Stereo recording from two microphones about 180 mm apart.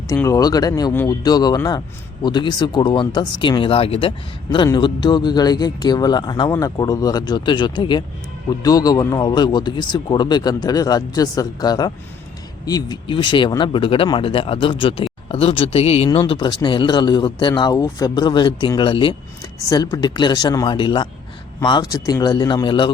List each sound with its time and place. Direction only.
0.1 s speech: 20° left (ahead or behind)